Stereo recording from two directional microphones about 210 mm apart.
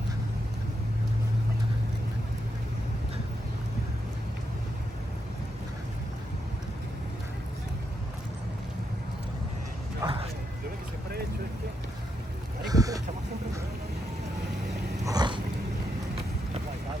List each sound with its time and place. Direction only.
10.0 s vehicle: 25° right (ahead or behind)
12.6 s a sound: 15° right (ahead or behind)
15.0 s dog: 20° right (ahead or behind)